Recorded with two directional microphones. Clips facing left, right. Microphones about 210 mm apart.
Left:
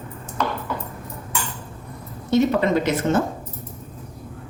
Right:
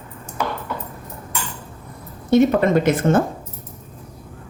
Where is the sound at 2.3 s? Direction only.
55° right (ahead or behind).